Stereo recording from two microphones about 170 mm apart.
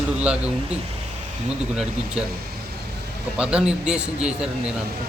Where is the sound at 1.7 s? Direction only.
5° right (ahead or behind).